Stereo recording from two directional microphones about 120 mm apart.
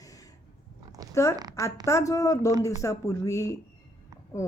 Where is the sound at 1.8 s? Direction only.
25° left (ahead or behind).